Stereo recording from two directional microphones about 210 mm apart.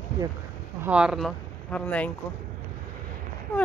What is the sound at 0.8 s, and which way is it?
Speech, 5° right (ahead or behind).